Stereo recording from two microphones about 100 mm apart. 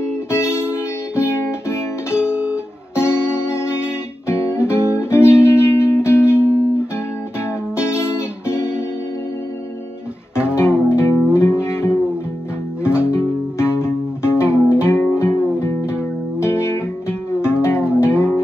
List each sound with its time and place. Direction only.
0.3 s music: 25° left (ahead or behind)
2.3 s guitar: 10° right (ahead or behind)
3.0 s music: 25° left (ahead or behind)
7.3 s music: 25° left (ahead or behind)
10.3 s music: 10° right (ahead or behind)
10.6 s music: 25° left (ahead or behind)